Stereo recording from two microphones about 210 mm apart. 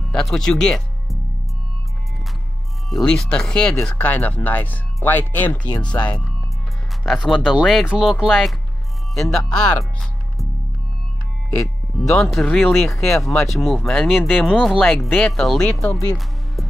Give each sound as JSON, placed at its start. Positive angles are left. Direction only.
{"t": 0.1, "sound": "speech", "side_deg": 0}
{"t": 2.9, "sound": "speech", "side_deg": 0}
{"t": 5.9, "sound": "speech", "side_deg": 20}
{"t": 7.0, "sound": "speech", "side_deg": 0}
{"t": 12.0, "sound": "speech", "side_deg": 0}